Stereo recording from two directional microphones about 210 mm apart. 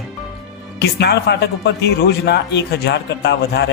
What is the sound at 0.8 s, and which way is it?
A man's voice, 50° left (ahead or behind).